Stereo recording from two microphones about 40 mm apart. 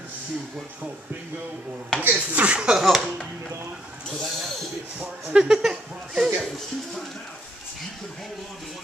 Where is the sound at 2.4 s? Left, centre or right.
Right.